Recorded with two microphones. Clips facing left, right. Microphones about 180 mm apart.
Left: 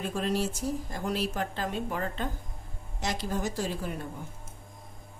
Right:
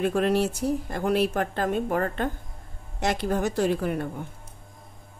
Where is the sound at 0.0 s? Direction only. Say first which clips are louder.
Right 7 dB; 65° right (ahead or behind).